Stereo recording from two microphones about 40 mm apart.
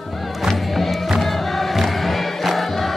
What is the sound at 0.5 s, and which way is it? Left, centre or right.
Music, centre.